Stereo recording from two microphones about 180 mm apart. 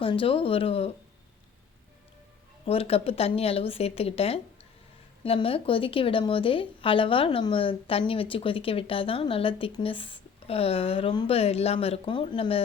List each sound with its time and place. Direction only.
0.0 s a woman's voice: 30° left (ahead or behind)
2.6 s a woman's voice: 35° left (ahead or behind)